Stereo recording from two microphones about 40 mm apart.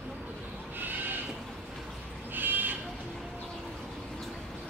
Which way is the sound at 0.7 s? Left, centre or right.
Right.